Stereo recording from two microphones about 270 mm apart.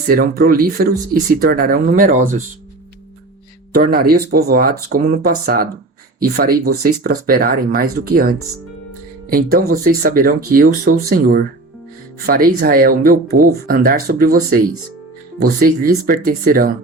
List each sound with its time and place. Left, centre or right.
0.1 s speech: right
3.7 s speech: right
15.4 s speech: right